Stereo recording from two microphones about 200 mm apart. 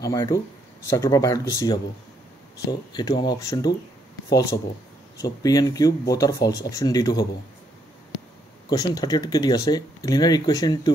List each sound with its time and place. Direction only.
0.0 s speech: 15° left (ahead or behind)
5.2 s speech: 15° left (ahead or behind)
8.6 s speech: 20° left (ahead or behind)